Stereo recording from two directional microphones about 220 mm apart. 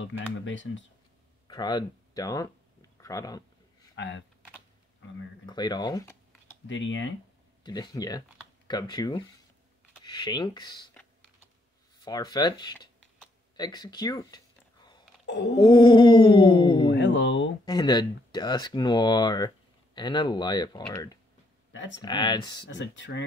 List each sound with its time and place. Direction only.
0.0 s speech: 60° left (ahead or behind)
1.5 s speech: 20° left (ahead or behind)
3.9 s speech: 50° left (ahead or behind)
5.5 s speech: 20° left (ahead or behind)
6.7 s speech: 60° left (ahead or behind)
7.6 s speech: 20° left (ahead or behind)
12.0 s speech: 20° left (ahead or behind)
13.6 s a sound: 20° left (ahead or behind)
15.2 s a sound: 55° left (ahead or behind)
15.5 s speech: 20° left (ahead or behind)
16.9 s speech: 50° left (ahead or behind)
17.6 s speech: 20° left (ahead or behind)
22.7 s speech: 55° left (ahead or behind)